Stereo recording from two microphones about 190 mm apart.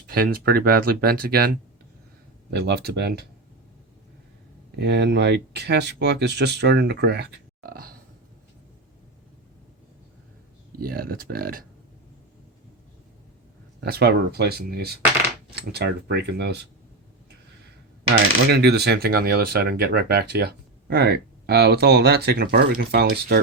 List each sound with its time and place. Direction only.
0.1 s speech: 50° right (ahead or behind)
4.8 s speech: 65° right (ahead or behind)
10.8 s speech: 50° right (ahead or behind)
13.8 s speech: 55° right (ahead or behind)
18.1 s speech: 55° right (ahead or behind)